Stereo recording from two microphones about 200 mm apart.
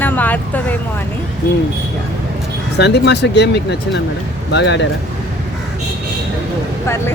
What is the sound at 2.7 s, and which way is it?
Speech, 55° left (ahead or behind).